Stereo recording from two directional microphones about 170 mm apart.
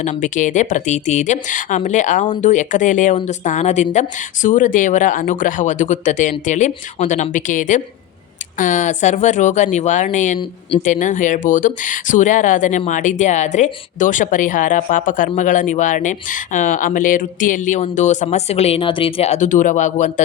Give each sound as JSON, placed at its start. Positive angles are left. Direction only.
{"t": 0.0, "sound": "speech", "side_deg": 45}